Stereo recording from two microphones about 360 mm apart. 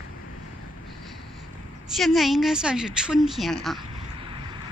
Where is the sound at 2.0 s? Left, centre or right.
Centre.